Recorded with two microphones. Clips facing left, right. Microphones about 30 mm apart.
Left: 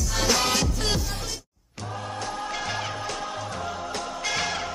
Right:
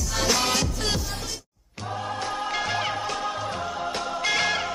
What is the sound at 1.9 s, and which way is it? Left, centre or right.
Music, centre.